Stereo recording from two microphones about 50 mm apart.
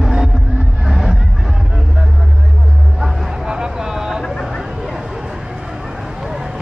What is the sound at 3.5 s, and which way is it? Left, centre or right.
Vehicle, centre.